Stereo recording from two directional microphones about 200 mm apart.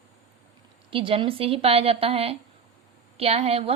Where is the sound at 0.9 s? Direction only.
25° right (ahead or behind).